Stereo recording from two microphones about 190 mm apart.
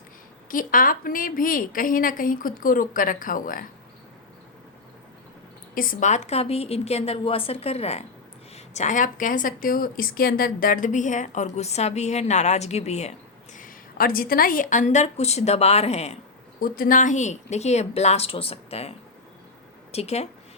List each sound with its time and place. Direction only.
0.5 s a woman's voice: 45° left (ahead or behind)
5.7 s a woman's voice: 45° left (ahead or behind)
16.6 s a woman's voice: 50° left (ahead or behind)